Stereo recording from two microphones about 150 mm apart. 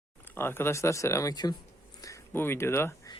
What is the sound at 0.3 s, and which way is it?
Speech, 15° left (ahead or behind).